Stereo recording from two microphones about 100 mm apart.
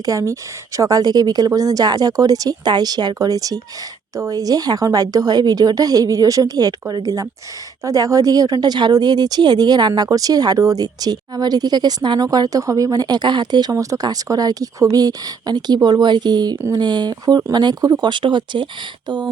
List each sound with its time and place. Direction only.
0.0 s speech: 30° right (ahead or behind)
13.7 s speech: 35° right (ahead or behind)